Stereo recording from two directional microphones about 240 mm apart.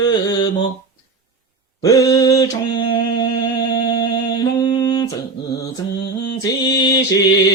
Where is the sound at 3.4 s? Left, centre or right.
Centre.